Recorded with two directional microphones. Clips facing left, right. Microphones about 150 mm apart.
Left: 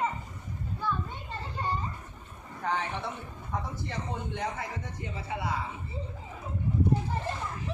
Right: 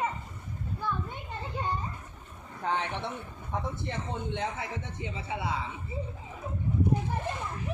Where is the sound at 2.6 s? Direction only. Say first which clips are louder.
Even; 20° right (ahead or behind).